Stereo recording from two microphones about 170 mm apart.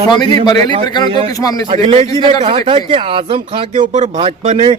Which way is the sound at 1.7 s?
35° right (ahead or behind).